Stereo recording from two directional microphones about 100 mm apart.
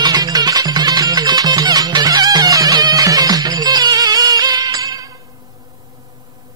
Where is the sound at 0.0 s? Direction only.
40° right (ahead or behind).